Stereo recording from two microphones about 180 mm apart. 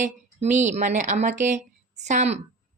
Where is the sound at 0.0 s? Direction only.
40° right (ahead or behind).